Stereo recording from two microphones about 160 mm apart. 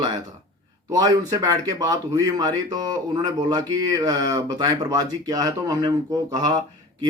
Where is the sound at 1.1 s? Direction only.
25° right (ahead or behind).